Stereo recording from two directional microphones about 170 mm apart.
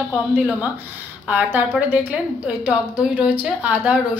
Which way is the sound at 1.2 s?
10° right (ahead or behind).